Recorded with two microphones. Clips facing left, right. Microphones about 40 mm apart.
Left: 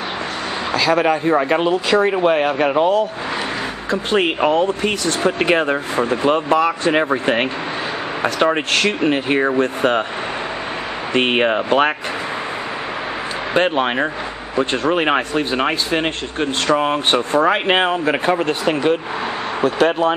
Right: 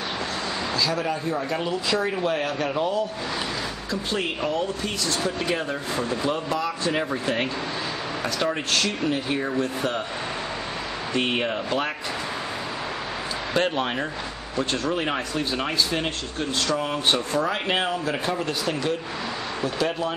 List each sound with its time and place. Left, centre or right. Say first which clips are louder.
0.7 s a man's voice: left 11 dB; left
1.7 s speech: left 9 dB; left
11.1 s speech: left 9 dB; left
13.5 s speech: left 7 dB; left